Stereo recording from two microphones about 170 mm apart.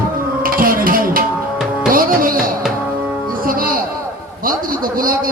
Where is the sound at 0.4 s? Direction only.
55° right (ahead or behind).